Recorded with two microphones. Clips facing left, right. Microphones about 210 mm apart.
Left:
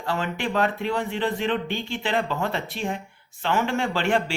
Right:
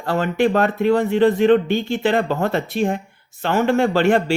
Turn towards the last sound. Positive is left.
turn(degrees=-45)  # may be behind; listen again after turning